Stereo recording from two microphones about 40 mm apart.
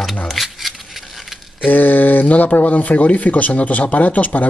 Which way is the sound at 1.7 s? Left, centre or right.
Left.